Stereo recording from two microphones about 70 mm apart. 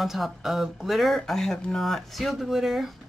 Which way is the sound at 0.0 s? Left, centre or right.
Centre.